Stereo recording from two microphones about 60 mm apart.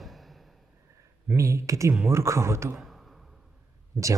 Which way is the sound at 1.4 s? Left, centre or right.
Right.